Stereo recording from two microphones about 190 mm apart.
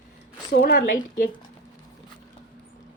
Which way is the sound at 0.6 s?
60° left (ahead or behind).